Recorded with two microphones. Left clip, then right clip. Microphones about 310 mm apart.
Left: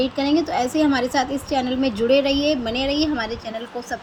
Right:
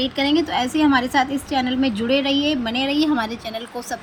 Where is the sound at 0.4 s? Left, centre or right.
Centre.